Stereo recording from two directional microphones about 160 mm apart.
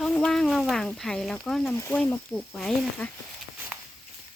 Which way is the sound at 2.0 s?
5° left (ahead or behind).